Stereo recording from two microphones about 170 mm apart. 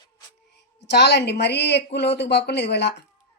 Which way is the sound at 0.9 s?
80° left.